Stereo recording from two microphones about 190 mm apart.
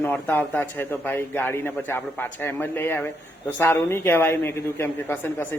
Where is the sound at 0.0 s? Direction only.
10° left (ahead or behind).